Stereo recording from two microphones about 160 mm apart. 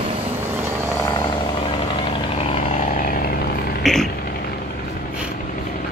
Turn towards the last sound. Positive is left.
turn(degrees=0)  # may be behind; listen again after turning